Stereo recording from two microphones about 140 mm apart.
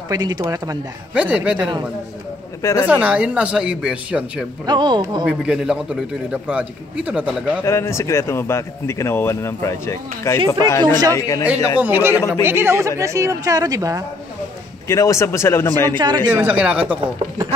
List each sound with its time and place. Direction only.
0.1 s speech: 30° right (ahead or behind)
1.1 s speech: 10° right (ahead or behind)
2.6 s speech: 20° left (ahead or behind)
2.9 s speech: 10° right (ahead or behind)
4.6 s speech: 35° right (ahead or behind)
5.2 s a man's voice: 5° right (ahead or behind)
7.6 s speech: 20° left (ahead or behind)
10.8 s speech: 30° right (ahead or behind)
11.1 s speech: 25° left (ahead or behind)
11.8 s speech: 15° right (ahead or behind)
14.9 s speech: 20° left (ahead or behind)
15.9 s speech: 30° right (ahead or behind)
16.3 s speech: 10° right (ahead or behind)